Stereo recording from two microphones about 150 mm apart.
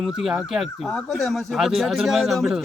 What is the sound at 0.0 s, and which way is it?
Speech, centre (ahead or behind).